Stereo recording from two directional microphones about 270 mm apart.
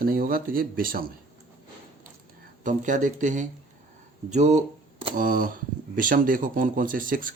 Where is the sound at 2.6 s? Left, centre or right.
Right.